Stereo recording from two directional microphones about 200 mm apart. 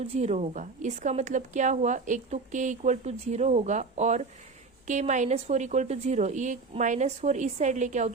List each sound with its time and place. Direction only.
0.0 s a woman's voice: 30° right (ahead or behind)